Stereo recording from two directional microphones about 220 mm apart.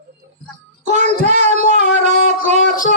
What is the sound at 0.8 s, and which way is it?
Child singing, 30° right (ahead or behind).